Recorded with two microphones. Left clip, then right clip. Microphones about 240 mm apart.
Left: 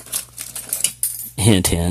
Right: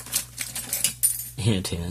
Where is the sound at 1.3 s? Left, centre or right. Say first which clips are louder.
Left 13 dB; left.